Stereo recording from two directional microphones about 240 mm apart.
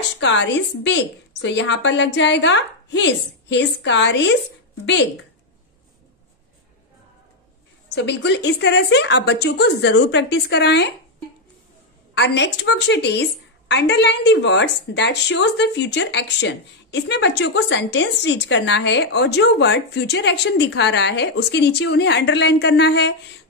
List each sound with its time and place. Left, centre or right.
0.2 s a woman's voice: left
7.9 s a woman's voice: left
12.1 s a woman's voice: left